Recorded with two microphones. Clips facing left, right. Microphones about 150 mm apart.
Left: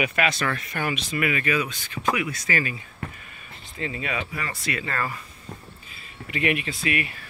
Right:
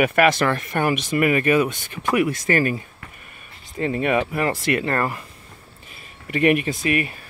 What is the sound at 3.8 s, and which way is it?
Speech, 50° right (ahead or behind).